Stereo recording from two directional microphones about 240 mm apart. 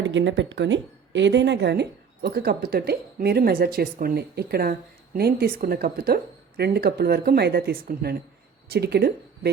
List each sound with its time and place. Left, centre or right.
0.0 s speech: right